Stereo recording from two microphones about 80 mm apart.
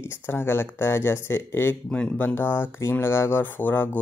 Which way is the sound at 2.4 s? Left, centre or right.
Left.